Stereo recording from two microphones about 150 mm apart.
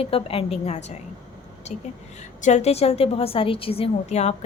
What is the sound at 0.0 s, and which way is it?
A woman's voice, 40° left (ahead or behind).